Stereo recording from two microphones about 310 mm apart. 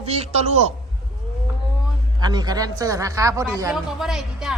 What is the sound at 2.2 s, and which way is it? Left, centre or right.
Speech, centre.